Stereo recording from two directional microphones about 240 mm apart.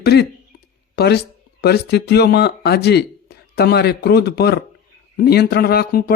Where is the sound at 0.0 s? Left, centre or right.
Left.